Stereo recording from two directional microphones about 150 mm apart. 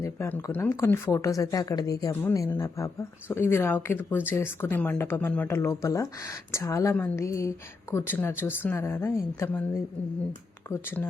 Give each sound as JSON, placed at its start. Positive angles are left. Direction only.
{"t": 0.0, "sound": "speech", "side_deg": 15}
{"t": 10.7, "sound": "speech", "side_deg": 15}